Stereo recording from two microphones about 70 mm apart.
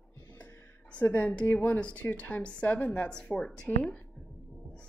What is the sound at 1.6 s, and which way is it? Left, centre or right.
A woman's voice, left.